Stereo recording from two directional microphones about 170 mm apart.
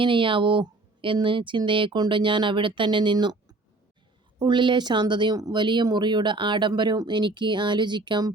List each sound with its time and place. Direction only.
0.0 s speech: 30° right (ahead or behind)
4.4 s speech: 25° right (ahead or behind)